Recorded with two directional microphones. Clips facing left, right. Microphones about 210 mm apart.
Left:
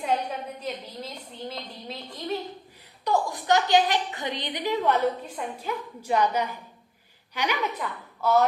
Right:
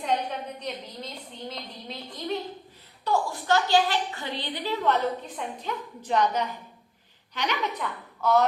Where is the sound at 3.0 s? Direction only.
15° left (ahead or behind).